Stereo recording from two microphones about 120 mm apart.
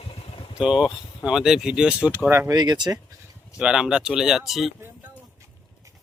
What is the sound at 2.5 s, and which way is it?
Speech, 35° right (ahead or behind).